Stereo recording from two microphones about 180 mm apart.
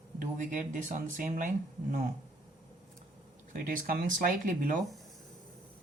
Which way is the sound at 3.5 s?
50° right (ahead or behind).